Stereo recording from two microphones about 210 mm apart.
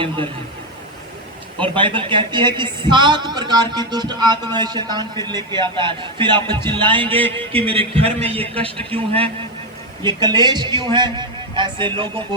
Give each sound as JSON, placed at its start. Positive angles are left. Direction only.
{"t": 1.7, "sound": "speech", "side_deg": -25}
{"t": 7.3, "sound": "a sound", "side_deg": 5}
{"t": 7.6, "sound": "speech", "side_deg": -25}